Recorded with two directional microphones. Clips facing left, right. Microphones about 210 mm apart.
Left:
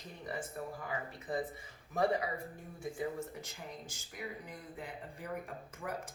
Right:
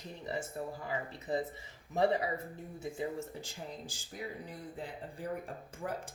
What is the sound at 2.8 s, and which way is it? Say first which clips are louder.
Speech: even; 25° right (ahead or behind).